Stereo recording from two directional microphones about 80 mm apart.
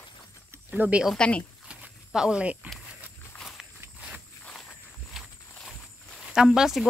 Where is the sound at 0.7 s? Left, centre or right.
Centre.